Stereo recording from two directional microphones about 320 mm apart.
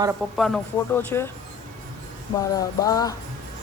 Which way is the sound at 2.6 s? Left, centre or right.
Centre.